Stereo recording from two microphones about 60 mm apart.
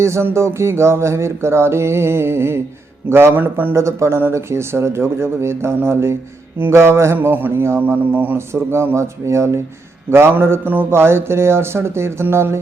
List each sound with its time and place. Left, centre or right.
0.0 s music: right
3.1 s mantra: right
3.8 s music: right
6.6 s mantra: right
8.4 s music: right
10.1 s mantra: right
10.9 s music: right